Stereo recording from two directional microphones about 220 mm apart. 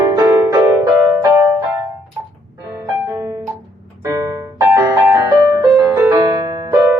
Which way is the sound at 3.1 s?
15° right (ahead or behind).